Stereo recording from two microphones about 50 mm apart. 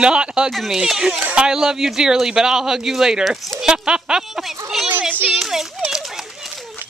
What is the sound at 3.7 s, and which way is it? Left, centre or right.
Speech, centre.